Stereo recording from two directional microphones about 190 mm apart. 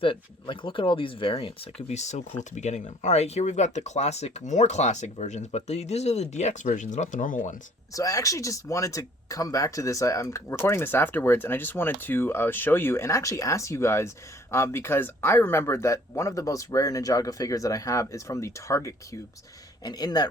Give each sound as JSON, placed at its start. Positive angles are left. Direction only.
{"t": 0.0, "sound": "speech", "side_deg": 25}
{"t": 7.9, "sound": "speech", "side_deg": 15}